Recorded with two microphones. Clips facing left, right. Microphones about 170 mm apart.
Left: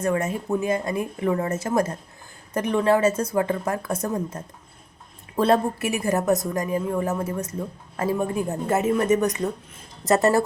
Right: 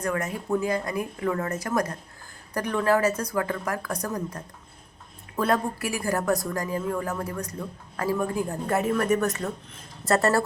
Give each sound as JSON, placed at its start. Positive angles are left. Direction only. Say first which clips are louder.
{"t": 0.0, "sound": "a woman's voice", "louder": "left 5 dB", "side_deg": 25}